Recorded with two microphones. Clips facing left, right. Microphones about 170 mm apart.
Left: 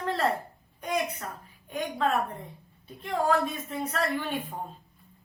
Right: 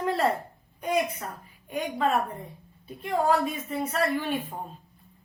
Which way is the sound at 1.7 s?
5° right (ahead or behind).